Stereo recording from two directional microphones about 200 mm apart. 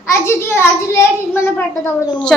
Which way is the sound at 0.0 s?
15° left (ahead or behind).